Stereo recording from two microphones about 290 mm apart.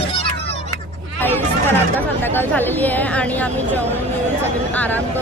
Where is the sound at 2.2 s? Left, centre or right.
Centre.